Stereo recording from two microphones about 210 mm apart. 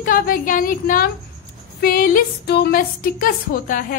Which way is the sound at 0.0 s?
40° left (ahead or behind).